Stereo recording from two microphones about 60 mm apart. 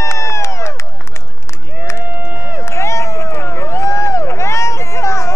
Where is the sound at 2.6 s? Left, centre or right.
Left.